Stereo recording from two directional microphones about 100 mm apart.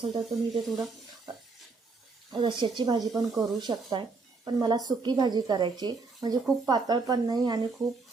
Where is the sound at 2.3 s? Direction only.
50° right (ahead or behind).